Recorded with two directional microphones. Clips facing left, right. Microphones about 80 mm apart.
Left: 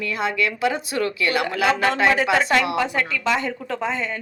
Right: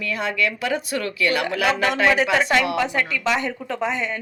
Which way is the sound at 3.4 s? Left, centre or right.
Centre.